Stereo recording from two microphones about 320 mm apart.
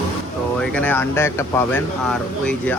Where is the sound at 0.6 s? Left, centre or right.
Centre.